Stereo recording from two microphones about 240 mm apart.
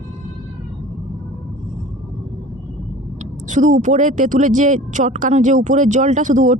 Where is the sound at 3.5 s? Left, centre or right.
Right.